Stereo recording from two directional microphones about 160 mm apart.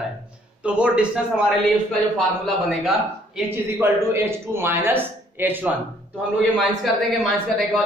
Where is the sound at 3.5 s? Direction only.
15° right (ahead or behind).